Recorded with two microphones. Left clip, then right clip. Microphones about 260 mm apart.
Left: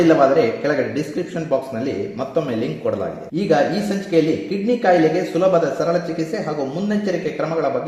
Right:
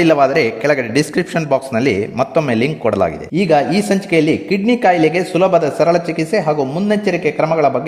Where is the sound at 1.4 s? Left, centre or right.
Right.